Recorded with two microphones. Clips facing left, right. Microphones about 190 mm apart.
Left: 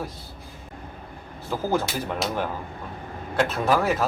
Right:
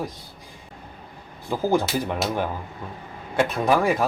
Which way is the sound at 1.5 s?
15° right (ahead or behind).